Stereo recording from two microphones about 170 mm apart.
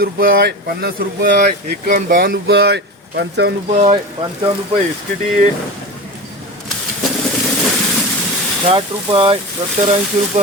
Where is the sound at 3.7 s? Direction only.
40° right (ahead or behind).